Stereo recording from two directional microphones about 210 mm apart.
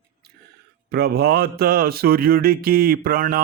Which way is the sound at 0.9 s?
50° right (ahead or behind).